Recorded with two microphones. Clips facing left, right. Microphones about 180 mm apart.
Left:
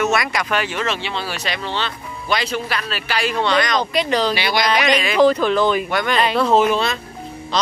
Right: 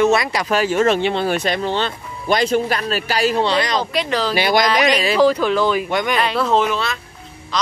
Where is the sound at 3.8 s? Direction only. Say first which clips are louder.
Left 1 dB; centre (ahead or behind).